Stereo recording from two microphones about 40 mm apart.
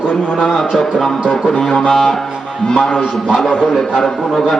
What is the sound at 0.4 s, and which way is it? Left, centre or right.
Speech, centre.